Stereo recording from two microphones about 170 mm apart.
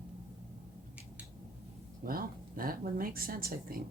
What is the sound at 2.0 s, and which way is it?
Speech, 60° right (ahead or behind).